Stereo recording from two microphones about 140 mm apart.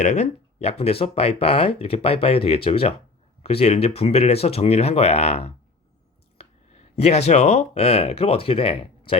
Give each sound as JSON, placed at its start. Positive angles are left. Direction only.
{"t": 0.0, "sound": "speech", "side_deg": 55}